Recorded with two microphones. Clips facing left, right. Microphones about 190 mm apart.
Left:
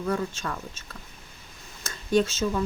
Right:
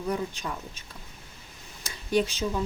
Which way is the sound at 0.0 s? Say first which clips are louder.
Left 2 dB; 15° right (ahead or behind).